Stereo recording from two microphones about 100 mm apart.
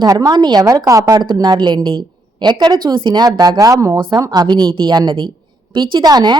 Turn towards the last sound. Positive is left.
turn(degrees=-45)  # may be behind; listen again after turning